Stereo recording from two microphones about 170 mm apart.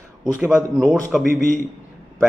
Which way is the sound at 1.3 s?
50° left (ahead or behind).